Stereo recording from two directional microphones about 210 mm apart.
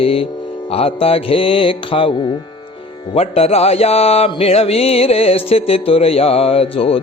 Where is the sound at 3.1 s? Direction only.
30° left (ahead or behind).